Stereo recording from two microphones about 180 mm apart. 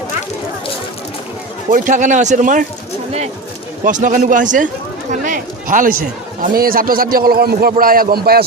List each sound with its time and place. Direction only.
1.7 s speech: 45° right (ahead or behind)
3.8 s speech: 45° right (ahead or behind)